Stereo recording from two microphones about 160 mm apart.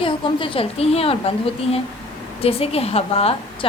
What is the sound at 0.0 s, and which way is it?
A woman's voice, 35° left (ahead or behind).